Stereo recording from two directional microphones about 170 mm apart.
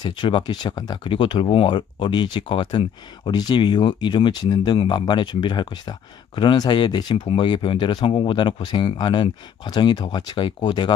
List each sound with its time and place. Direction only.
0.0 s speech: 30° left (ahead or behind)